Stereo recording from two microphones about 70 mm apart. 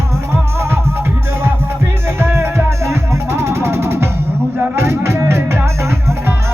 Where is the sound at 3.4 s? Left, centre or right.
Right.